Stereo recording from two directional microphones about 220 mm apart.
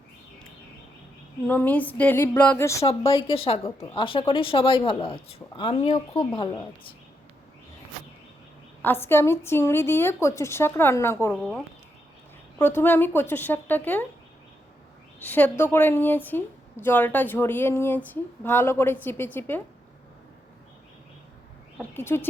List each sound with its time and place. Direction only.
1.5 s speech: 5° left (ahead or behind)
8.8 s a woman's voice: 10° left (ahead or behind)
15.2 s a woman's voice: 10° left (ahead or behind)
21.8 s a woman's voice: 10° left (ahead or behind)